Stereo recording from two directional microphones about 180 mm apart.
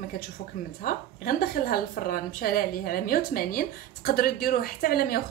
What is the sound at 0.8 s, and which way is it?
A woman's voice, 55° left (ahead or behind).